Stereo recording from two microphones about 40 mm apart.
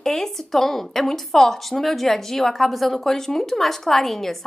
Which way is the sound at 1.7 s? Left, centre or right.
Centre.